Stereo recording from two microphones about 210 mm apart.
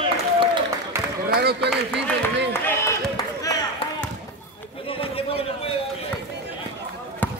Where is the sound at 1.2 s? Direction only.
50° right (ahead or behind).